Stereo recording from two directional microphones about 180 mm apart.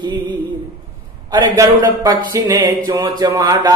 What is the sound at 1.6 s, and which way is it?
Speech, 20° right (ahead or behind).